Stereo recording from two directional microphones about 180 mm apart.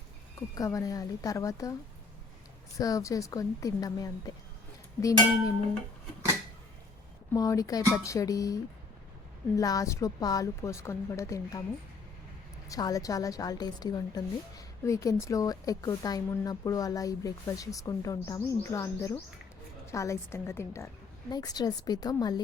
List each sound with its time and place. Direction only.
0.3 s a woman's voice: 20° left (ahead or behind)
2.7 s a woman's voice: 20° left (ahead or behind)
7.3 s a woman's voice: 20° left (ahead or behind)
9.6 s a woman's voice: 20° left (ahead or behind)
12.6 s a woman's voice: 20° left (ahead or behind)